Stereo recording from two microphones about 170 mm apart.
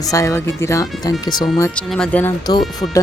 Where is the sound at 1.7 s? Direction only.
5° left (ahead or behind).